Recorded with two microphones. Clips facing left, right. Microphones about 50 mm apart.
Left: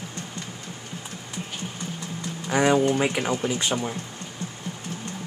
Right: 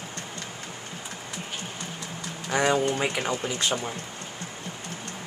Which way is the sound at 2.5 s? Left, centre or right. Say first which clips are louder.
Left 3 dB; centre.